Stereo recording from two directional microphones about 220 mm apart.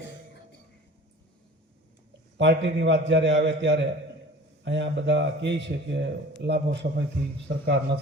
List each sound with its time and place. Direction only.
2.4 s a man's voice: 50° right (ahead or behind)